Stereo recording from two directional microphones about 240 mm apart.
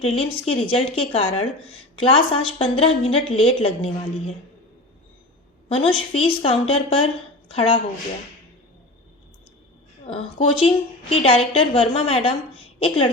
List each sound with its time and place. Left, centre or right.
0.0 s a woman's voice: left
5.6 s a woman's voice: left
10.1 s a woman's voice: left